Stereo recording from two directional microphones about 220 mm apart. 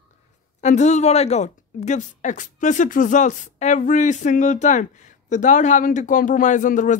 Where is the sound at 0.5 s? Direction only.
30° left (ahead or behind).